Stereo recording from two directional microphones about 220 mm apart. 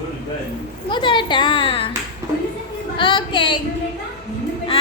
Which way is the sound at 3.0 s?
25° left (ahead or behind).